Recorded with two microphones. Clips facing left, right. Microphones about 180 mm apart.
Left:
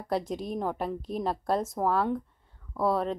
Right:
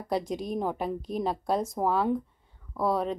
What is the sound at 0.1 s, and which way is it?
Speech, centre (ahead or behind).